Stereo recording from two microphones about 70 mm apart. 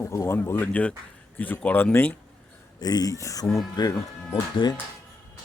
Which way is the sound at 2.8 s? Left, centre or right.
Left.